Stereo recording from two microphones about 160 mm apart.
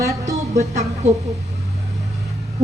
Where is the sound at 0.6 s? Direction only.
45° right (ahead or behind).